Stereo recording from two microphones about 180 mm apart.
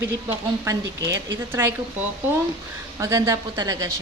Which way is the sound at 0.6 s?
20° right (ahead or behind).